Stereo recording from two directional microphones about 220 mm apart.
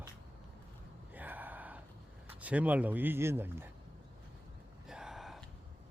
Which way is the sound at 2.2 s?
5° right (ahead or behind).